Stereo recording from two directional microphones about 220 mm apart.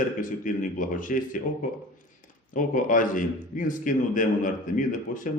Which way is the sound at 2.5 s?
35° left (ahead or behind).